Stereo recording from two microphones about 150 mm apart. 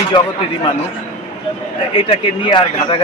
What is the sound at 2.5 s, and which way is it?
Speech, 30° left (ahead or behind).